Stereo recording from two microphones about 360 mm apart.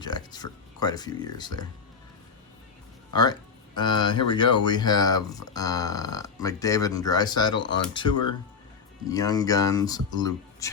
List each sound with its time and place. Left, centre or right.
0.0 s speech: centre
3.8 s speech: centre
8.1 s speech: left
9.0 s speech: centre